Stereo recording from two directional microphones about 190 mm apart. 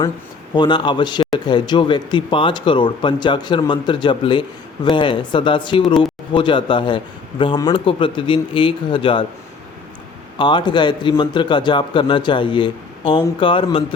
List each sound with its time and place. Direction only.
0.5 s a man's voice: 25° left (ahead or behind)
10.3 s a man's voice: 25° left (ahead or behind)